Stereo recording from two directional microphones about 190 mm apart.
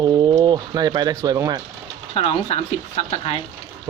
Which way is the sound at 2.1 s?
30° left (ahead or behind).